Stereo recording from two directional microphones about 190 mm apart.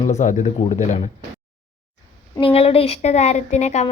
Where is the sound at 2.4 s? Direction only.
30° left (ahead or behind).